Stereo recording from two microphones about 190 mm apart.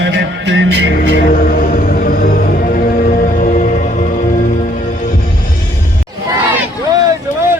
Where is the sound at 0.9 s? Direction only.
50° left (ahead or behind).